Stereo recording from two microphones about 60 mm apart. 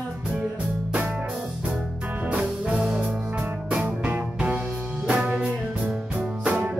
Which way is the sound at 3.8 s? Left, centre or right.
Right.